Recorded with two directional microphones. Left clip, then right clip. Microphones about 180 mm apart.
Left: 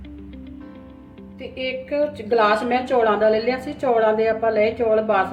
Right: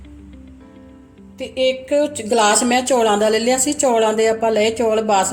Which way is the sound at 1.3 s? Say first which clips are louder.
Right 9 dB; 55° right (ahead or behind).